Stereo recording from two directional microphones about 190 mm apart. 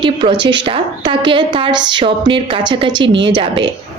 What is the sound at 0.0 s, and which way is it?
A woman's voice, 25° right (ahead or behind).